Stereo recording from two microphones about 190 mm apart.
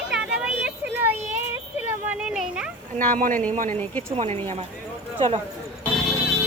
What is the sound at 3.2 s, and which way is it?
Speech, 45° right (ahead or behind).